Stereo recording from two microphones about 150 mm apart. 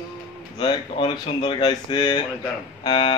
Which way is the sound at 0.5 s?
30° left (ahead or behind).